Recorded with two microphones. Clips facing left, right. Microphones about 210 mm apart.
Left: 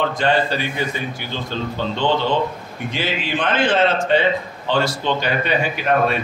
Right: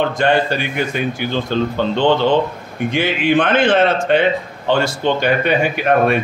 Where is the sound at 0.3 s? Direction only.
70° right (ahead or behind).